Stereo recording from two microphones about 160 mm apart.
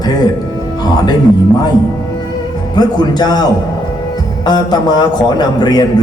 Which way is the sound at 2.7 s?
25° left (ahead or behind).